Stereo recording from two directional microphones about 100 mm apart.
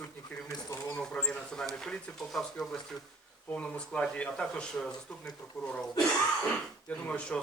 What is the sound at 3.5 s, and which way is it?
Speech, 10° left (ahead or behind).